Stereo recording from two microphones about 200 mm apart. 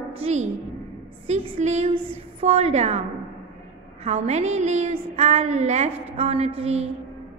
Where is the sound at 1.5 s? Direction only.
35° right (ahead or behind).